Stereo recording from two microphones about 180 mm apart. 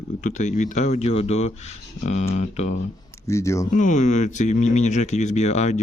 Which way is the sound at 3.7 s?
45° left (ahead or behind).